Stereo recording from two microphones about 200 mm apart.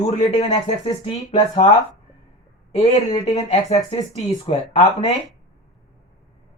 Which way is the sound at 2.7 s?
30° left (ahead or behind).